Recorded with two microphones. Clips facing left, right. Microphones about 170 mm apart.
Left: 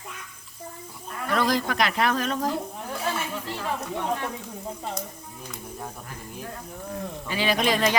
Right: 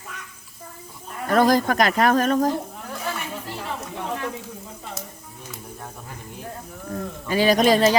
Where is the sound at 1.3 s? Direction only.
45° right (ahead or behind).